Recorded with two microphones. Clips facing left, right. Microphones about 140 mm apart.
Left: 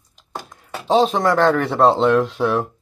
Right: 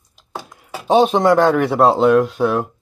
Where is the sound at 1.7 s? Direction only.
Centre (ahead or behind).